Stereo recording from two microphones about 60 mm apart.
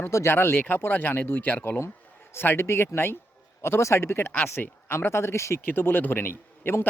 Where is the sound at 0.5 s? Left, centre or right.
Left.